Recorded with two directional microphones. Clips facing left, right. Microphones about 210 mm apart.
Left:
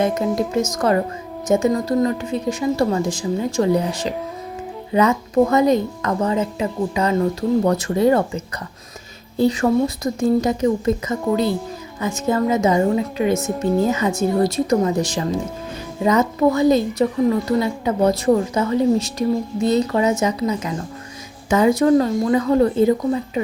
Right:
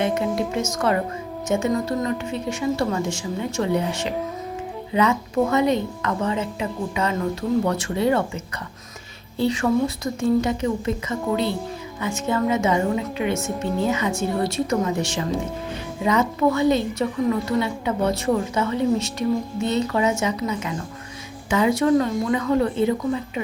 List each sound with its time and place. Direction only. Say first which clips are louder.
0.0 s speech: left 3 dB; 40° left (ahead or behind)
9.4 s speech: left 4 dB; 40° left (ahead or behind)